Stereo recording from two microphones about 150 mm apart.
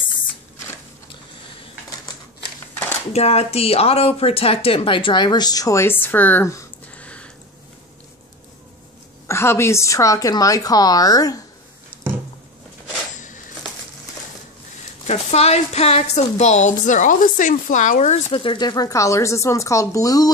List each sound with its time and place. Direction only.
3.1 s speech: 45° left (ahead or behind); by 7.1 s 15° left (ahead or behind)
9.3 s a woman's voice: 15° left (ahead or behind)
15.0 s a woman's voice: 45° left (ahead or behind)
18.3 s a woman's voice: 35° left (ahead or behind)